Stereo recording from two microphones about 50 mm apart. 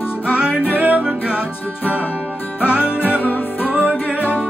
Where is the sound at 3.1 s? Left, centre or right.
Left.